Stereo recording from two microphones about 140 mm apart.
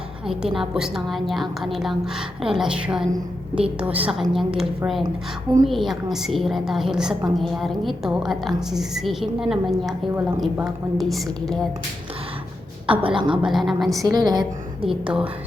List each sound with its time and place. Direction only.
0.3 s a woman's voice: centre (ahead or behind)
5.6 s a woman's voice: centre (ahead or behind)
12.9 s a woman's voice: 40° right (ahead or behind)
13.4 s a woman's voice: centre (ahead or behind)
14.0 s a woman's voice: 25° right (ahead or behind)
14.8 s a woman's voice: 5° right (ahead or behind)